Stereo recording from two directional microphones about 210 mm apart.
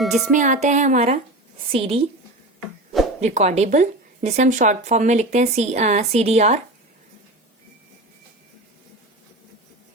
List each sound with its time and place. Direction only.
0.0 s speech: centre (ahead or behind)
0.3 s a woman's voice: 35° right (ahead or behind)
3.2 s speech: 30° right (ahead or behind)